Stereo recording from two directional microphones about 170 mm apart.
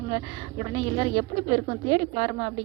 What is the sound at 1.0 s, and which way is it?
A woman's voice, 30° right (ahead or behind).